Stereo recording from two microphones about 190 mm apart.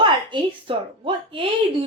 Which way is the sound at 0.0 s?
25° right (ahead or behind).